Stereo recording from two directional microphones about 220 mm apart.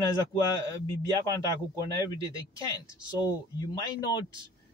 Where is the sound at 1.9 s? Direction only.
15° left (ahead or behind).